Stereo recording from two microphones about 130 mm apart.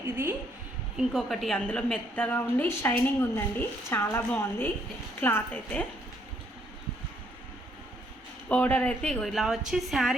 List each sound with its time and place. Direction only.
0.0 s a woman's voice: 20° right (ahead or behind)
0.9 s a woman's voice: centre (ahead or behind)
8.4 s a woman's voice: 15° left (ahead or behind)